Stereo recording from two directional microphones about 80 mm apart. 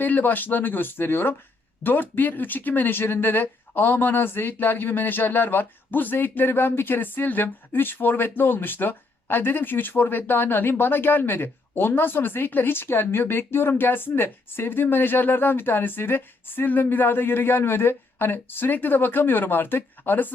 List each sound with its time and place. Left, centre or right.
0.0 s speech: left